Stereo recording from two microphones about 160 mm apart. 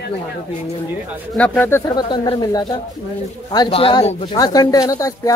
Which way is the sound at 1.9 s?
25° left (ahead or behind).